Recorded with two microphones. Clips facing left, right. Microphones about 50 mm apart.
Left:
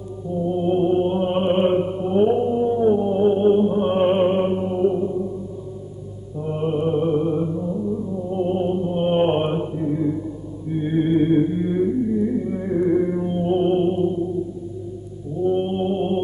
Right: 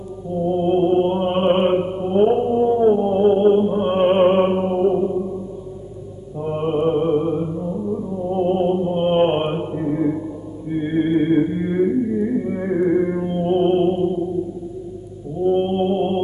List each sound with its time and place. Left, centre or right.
0.5 s chant: right
4.2 s music: right
6.4 s music: right
7.8 s music: right
8.9 s mantra: right
9.8 s a sound: right
10.7 s music: right
15.4 s mantra: right